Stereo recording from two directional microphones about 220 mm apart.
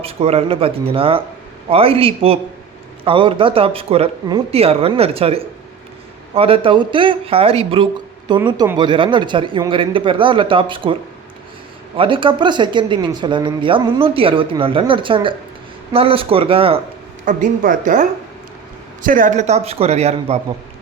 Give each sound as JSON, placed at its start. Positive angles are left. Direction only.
{"t": 0.0, "sound": "speech", "side_deg": -25}
{"t": 11.9, "sound": "speech", "side_deg": -25}
{"t": 17.2, "sound": "a woman's voice", "side_deg": -35}
{"t": 19.0, "sound": "speech", "side_deg": -40}